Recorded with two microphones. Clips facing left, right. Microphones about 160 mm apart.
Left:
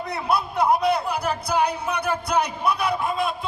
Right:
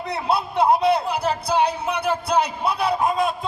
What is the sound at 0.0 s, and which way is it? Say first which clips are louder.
A man's voice: right 1 dB; 30° right (ahead or behind).